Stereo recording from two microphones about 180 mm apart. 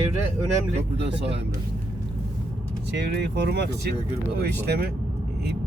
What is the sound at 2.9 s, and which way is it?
Speech, 70° right (ahead or behind).